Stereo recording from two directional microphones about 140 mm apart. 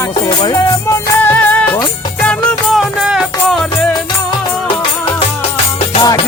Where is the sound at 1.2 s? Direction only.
10° left (ahead or behind).